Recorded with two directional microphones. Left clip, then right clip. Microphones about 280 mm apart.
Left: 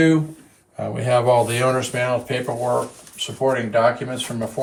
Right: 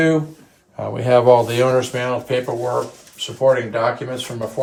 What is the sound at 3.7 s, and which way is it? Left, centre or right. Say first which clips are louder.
Speech: left 2 dB; centre.